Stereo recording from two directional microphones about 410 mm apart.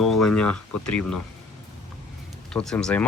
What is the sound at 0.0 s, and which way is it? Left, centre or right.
Speech, centre.